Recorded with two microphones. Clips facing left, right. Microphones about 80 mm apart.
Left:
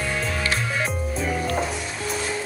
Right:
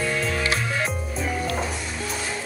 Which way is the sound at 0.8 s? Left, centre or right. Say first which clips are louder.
Left 1 dB; centre.